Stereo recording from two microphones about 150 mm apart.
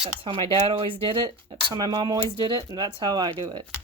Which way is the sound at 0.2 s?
35° right (ahead or behind).